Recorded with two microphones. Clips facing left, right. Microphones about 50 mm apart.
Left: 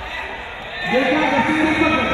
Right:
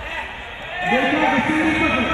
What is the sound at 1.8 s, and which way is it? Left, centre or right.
Music, left.